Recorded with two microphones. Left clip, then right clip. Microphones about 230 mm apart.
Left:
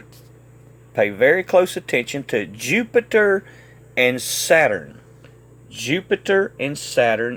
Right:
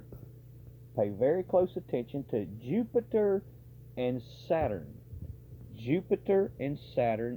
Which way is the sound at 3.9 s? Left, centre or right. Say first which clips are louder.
Left 16 dB; left.